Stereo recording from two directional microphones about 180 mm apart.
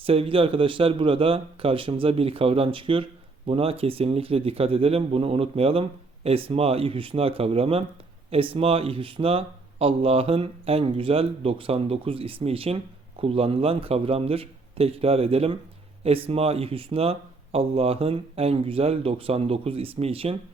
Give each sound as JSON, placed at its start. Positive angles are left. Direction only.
{"t": 0.0, "sound": "a man's voice", "side_deg": -30}